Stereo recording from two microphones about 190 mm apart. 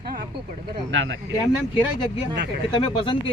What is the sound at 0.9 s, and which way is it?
Speech, 80° right.